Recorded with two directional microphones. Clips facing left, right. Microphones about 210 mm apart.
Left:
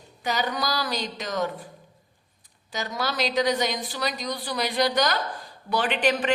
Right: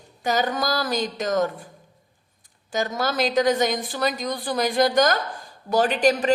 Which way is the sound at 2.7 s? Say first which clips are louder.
Right 5 dB; 45° right (ahead or behind).